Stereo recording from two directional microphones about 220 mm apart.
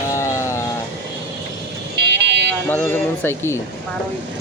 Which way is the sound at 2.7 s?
10° left (ahead or behind).